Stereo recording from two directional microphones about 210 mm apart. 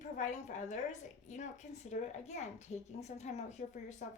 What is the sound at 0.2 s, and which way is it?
A woman's voice, 35° left (ahead or behind).